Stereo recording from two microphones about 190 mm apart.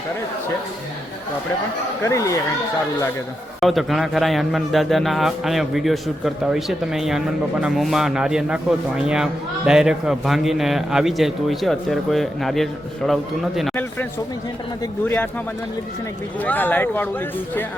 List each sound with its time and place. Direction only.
2.0 s a man's voice: 15° left (ahead or behind)
3.6 s a man's voice: centre (ahead or behind)
13.6 s a sound: 5° left (ahead or behind)
15.0 s a man's voice: 10° left (ahead or behind)
16.4 s a man's voice: 10° left (ahead or behind)